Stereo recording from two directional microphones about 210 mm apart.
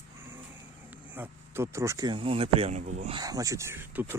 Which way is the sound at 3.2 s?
15° right (ahead or behind).